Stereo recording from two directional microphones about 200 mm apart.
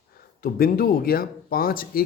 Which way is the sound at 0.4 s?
45° left (ahead or behind).